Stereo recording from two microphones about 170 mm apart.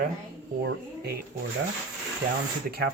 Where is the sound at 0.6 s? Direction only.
75° right (ahead or behind).